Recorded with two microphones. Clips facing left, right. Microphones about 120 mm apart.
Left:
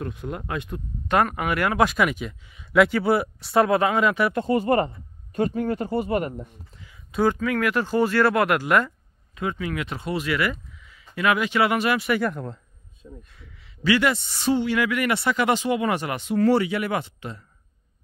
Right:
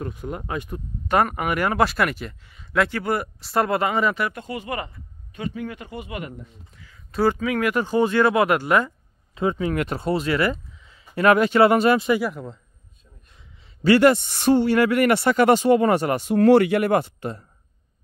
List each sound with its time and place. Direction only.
0.0 s speech: 5° right (ahead or behind)
4.3 s speech: 35° left (ahead or behind)
7.1 s speech: 5° right (ahead or behind)
9.3 s speech: 30° right (ahead or behind)
9.8 s speech: 40° right (ahead or behind)
11.1 s speech: 40° right (ahead or behind); by 12.2 s 25° right (ahead or behind)
12.2 s speech: 5° right (ahead or behind)
13.3 s a sound: 20° right (ahead or behind)
13.7 s speech: 45° right (ahead or behind)